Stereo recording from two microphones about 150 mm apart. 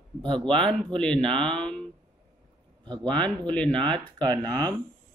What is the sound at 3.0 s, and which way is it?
Speech, 5° left (ahead or behind).